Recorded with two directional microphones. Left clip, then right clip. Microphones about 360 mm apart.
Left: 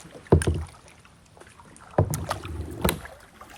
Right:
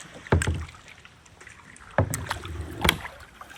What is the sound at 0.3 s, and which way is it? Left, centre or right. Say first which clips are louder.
Rowboat: left 4 dB; left.